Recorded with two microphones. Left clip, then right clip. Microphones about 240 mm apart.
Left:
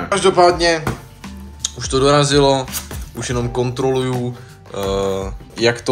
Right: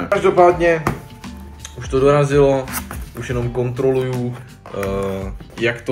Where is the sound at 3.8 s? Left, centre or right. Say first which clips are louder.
Right 2 dB; centre.